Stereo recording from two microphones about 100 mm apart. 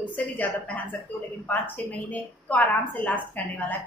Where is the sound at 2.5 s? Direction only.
15° left (ahead or behind).